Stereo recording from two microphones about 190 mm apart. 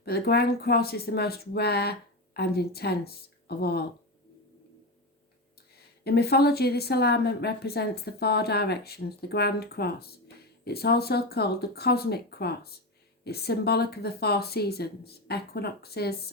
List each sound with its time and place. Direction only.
0.0 s a woman's voice: 55° left (ahead or behind)
6.1 s a woman's voice: 55° left (ahead or behind)